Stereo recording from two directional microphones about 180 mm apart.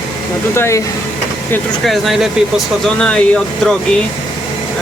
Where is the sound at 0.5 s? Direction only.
15° left (ahead or behind).